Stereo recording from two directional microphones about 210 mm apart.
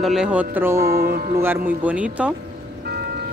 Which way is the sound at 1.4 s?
10° right (ahead or behind).